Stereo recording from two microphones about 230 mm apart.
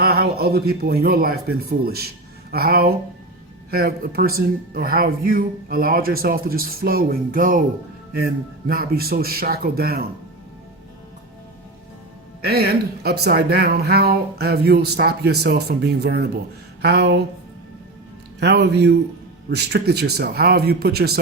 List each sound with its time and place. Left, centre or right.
0.0 s speech: right
12.4 s speech: right
18.3 s speech: right